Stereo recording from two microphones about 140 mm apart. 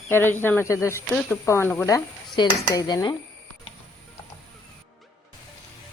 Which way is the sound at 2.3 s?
30° left (ahead or behind).